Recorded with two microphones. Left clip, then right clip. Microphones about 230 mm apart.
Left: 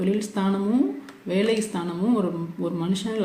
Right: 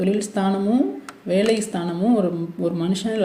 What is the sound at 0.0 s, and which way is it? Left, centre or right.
A woman's voice, centre.